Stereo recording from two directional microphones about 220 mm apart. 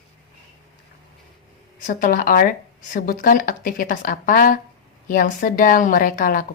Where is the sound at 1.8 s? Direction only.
40° left (ahead or behind).